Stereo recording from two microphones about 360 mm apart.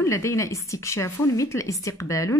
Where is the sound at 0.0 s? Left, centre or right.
Centre.